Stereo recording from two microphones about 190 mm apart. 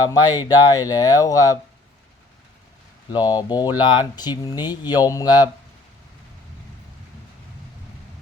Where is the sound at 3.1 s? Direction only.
20° left (ahead or behind).